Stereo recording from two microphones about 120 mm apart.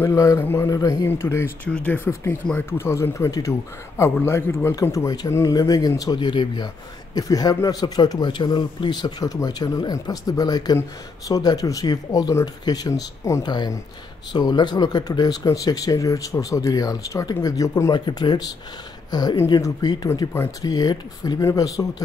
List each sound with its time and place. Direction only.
0.0 s speech: 25° left (ahead or behind); by 2.1 s 10° left (ahead or behind)
2.5 s speech: 20° left (ahead or behind)
17.9 s speech: 40° left (ahead or behind)